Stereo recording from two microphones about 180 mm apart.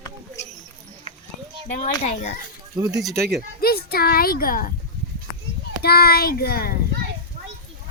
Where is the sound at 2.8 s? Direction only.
20° right (ahead or behind).